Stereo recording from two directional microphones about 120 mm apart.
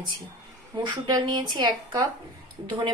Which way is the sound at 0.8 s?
40° right (ahead or behind).